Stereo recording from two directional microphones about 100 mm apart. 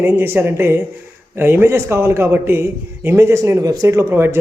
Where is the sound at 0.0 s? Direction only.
25° right (ahead or behind).